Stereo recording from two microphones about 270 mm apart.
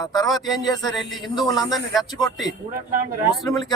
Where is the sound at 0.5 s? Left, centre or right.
Centre.